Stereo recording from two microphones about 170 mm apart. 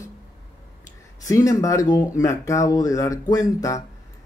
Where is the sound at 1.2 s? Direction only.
20° left (ahead or behind).